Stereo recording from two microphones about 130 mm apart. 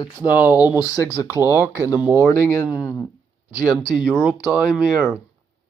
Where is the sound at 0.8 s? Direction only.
25° left (ahead or behind).